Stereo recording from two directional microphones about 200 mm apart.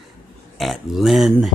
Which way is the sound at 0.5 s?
Centre (ahead or behind).